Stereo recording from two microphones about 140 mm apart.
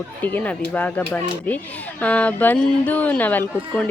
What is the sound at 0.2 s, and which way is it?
A woman's voice, 10° left (ahead or behind).